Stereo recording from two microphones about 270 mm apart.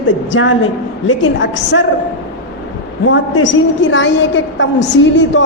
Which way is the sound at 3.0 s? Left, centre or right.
Left.